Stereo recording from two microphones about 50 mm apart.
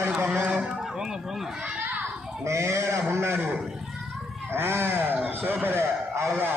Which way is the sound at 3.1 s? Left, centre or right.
Right.